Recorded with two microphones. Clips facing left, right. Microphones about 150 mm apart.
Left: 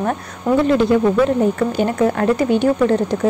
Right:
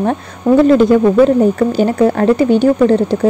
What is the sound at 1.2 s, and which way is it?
A woman's voice, 35° right (ahead or behind).